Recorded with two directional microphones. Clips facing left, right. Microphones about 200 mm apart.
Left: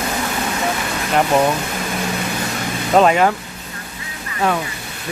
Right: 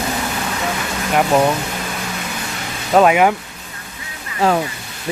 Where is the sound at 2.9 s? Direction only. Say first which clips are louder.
Right 1 dB; 5° right (ahead or behind).